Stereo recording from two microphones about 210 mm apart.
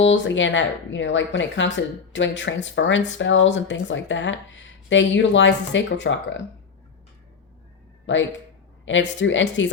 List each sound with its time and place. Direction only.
0.0 s speech: 60° left (ahead or behind)
8.0 s speech: 60° left (ahead or behind)